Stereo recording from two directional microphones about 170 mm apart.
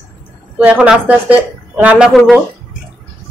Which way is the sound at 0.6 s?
5° right (ahead or behind).